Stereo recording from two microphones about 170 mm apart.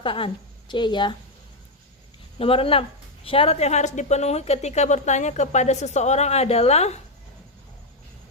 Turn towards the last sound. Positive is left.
turn(degrees=40)  # may be behind; listen again after turning